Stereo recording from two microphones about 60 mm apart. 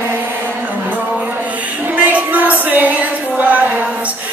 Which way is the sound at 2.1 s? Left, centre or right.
Right.